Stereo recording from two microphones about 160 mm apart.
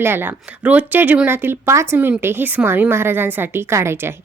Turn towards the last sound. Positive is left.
turn(degrees=-15)  # may be behind; listen again after turning